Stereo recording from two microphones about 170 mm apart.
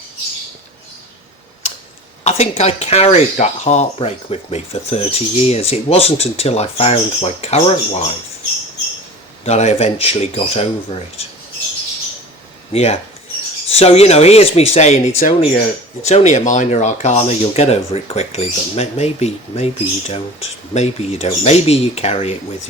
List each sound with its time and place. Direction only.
2.2 s speech: 40° left (ahead or behind)
9.4 s speech: 40° left (ahead or behind)
12.7 s speech: 40° left (ahead or behind)